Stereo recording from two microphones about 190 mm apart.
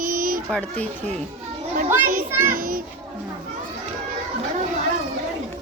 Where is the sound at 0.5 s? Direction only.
5° left (ahead or behind).